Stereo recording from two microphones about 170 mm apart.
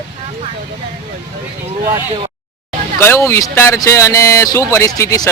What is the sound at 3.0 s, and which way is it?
Speech, 15° left (ahead or behind).